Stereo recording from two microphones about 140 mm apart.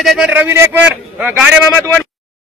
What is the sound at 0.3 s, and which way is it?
Speech, 15° right (ahead or behind).